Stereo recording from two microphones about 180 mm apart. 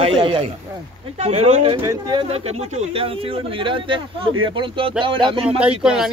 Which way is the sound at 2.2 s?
35° right (ahead or behind).